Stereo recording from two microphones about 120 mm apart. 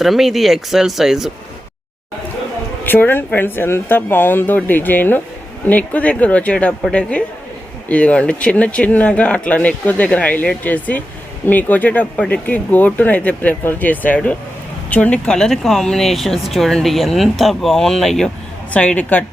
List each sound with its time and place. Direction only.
0.0 s speech: centre (ahead or behind)
2.8 s speech: 15° left (ahead or behind)
7.9 s speech: 10° left (ahead or behind)